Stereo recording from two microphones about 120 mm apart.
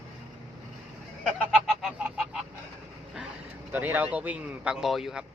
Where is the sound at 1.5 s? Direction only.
5° right (ahead or behind).